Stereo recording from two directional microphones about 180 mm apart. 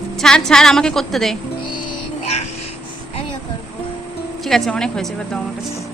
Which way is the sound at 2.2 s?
35° left (ahead or behind).